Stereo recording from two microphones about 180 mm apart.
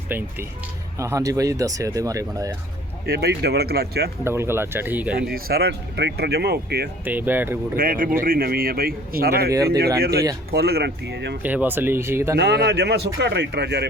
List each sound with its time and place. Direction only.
0.1 s speech: 10° right (ahead or behind)
3.1 s speech: 60° right (ahead or behind)
4.2 s speech: 15° right (ahead or behind)
5.3 s speech: 60° right (ahead or behind)
7.0 s speech: 10° right (ahead or behind)
7.8 s speech: 50° right (ahead or behind); by 11.3 s 70° right (ahead or behind)
11.4 s speech: 10° right (ahead or behind)
12.4 s speech: 65° right (ahead or behind)